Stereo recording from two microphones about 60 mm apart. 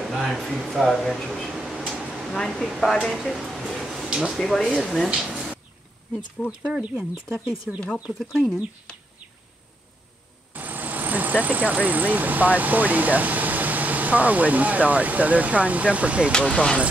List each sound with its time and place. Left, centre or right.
0.0 s speech: centre
1.9 s a sound: centre
2.2 s a woman's voice: centre
3.3 s a sound: centre
4.1 s speech: centre
4.4 s speech: centre
5.1 s speech: centre
6.6 s speech: centre
7.7 s speech: centre
8.9 s bird: centre
10.5 s speech: right
16.5 s speech: centre